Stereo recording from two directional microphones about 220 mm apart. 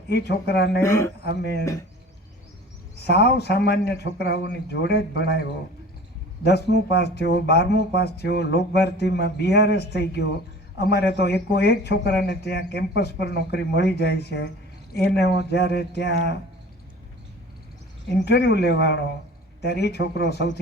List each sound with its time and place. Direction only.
0.1 s speech: 50° left (ahead or behind)
0.8 s a man's voice: 15° left (ahead or behind)
1.2 s speech: 50° left (ahead or behind)
3.0 s speech: 50° left (ahead or behind)
6.4 s speech: 50° left (ahead or behind)
18.3 s speech: 50° left (ahead or behind)